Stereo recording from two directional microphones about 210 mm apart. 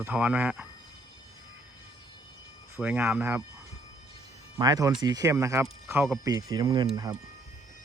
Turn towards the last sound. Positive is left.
turn(degrees=-20)  # may be behind; listen again after turning